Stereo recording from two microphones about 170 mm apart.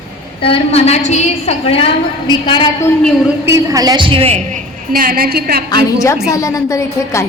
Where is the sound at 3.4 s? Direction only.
20° right (ahead or behind); by 4.4 s 35° right (ahead or behind).